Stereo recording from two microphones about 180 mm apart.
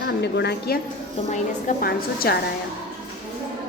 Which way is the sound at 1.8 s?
55° left (ahead or behind).